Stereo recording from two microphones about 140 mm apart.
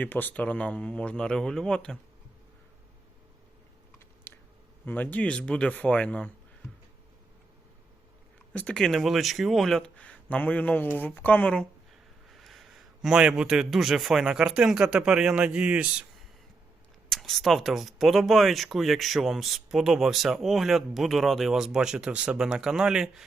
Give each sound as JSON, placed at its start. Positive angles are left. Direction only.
{"t": 0.0, "sound": "speech", "side_deg": 15}
{"t": 4.3, "sound": "a sound", "side_deg": 15}
{"t": 4.9, "sound": "speech", "side_deg": 10}
{"t": 8.5, "sound": "a man's voice", "side_deg": 5}